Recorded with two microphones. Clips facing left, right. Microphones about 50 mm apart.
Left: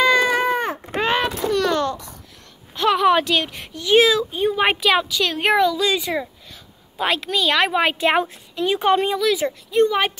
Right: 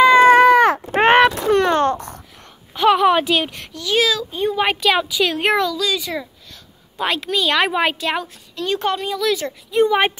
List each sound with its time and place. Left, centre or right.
0.4 s cat: right
0.9 s a sound: right
2.7 s a sound: centre
3.7 s a woman's voice: left
4.3 s speech: centre
5.6 s a woman's voice: left
7.0 s speech: centre
8.0 s a woman's voice: left
8.6 s speech: centre
8.9 s a woman's voice: left
9.4 s speech: centre
9.8 s speech: right